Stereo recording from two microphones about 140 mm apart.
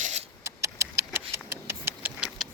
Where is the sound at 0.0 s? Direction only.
55° right (ahead or behind).